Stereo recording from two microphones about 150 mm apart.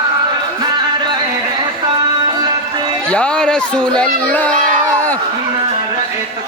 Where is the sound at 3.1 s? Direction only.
10° left (ahead or behind).